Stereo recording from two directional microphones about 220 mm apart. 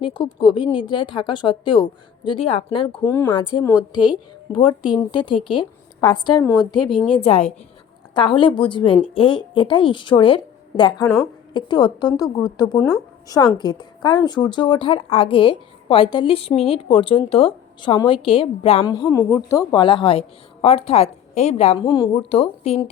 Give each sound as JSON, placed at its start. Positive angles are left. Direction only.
{"t": 0.0, "sound": "a woman's voice", "side_deg": 20}
{"t": 2.9, "sound": "a woman's voice", "side_deg": 10}
{"t": 11.0, "sound": "a woman's voice", "side_deg": 5}
{"t": 11.5, "sound": "a woman's voice", "side_deg": 20}